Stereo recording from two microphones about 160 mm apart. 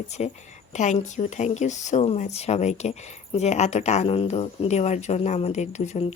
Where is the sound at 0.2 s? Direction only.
45° left (ahead or behind).